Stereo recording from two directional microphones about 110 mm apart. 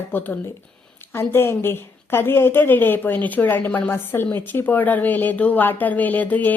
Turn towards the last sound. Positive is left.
turn(degrees=15)  # may be behind; listen again after turning